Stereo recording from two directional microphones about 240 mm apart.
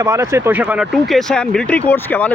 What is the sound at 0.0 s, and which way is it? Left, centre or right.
Speech, centre.